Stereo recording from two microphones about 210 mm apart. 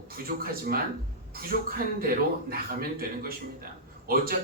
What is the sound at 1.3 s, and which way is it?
A man's voice, 45° right (ahead or behind).